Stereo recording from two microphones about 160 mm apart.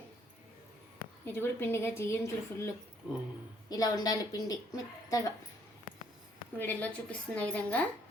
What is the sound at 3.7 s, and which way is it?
Speech, 25° left (ahead or behind).